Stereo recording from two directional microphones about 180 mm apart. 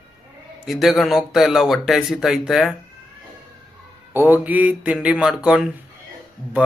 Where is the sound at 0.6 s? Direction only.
Centre (ahead or behind).